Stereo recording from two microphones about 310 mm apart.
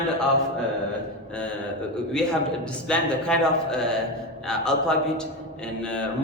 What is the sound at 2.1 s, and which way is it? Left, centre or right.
A man's voice, centre.